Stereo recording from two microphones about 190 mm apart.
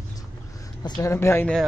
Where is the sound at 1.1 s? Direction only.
10° left (ahead or behind).